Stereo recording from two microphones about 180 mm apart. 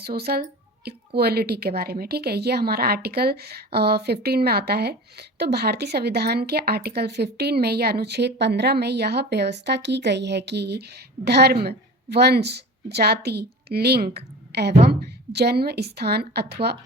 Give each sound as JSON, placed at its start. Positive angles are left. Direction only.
{"t": 0.0, "sound": "a woman's voice", "side_deg": -60}